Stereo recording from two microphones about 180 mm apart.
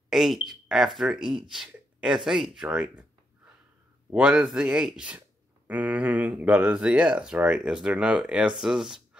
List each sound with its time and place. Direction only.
0.1 s speech: centre (ahead or behind)